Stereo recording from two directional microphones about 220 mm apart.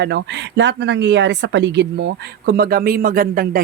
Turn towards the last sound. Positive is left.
turn(degrees=-40)  # may be behind; listen again after turning